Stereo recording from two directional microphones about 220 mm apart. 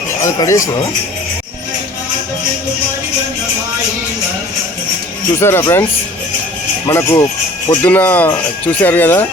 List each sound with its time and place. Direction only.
0.2 s speech: 15° left (ahead or behind)
5.4 s speech: 10° left (ahead or behind)
6.8 s speech: 15° left (ahead or behind)